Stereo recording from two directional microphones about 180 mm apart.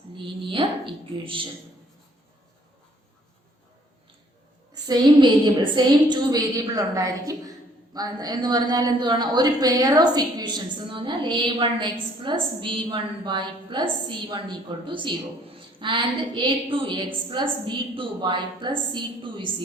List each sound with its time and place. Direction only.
0.2 s speech: 30° right (ahead or behind)
4.7 s a woman's voice: 20° right (ahead or behind)